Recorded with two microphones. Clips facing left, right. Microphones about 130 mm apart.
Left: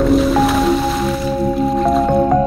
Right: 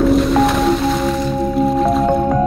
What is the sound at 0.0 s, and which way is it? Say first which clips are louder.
Music: even; centre (ahead or behind).